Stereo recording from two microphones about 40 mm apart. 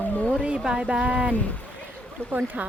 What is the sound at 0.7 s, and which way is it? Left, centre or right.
Speech, right.